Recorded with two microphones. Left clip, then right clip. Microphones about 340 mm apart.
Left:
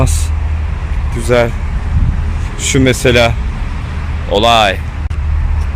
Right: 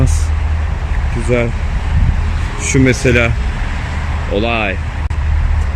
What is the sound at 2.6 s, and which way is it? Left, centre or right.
Speech, centre.